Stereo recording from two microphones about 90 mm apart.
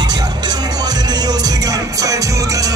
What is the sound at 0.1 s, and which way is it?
Music, 50° right (ahead or behind).